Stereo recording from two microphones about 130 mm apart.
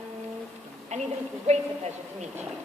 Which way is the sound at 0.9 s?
60° right (ahead or behind).